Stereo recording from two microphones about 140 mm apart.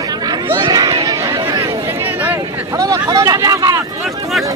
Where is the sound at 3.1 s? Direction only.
25° right (ahead or behind).